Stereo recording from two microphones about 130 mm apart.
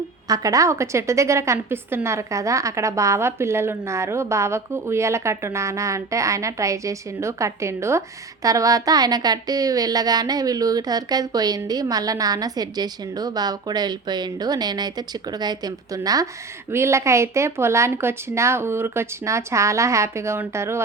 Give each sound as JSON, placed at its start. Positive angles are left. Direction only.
{"t": 0.3, "sound": "a woman's voice", "side_deg": -30}